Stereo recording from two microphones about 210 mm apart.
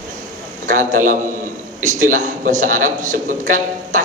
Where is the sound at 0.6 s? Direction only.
40° right (ahead or behind).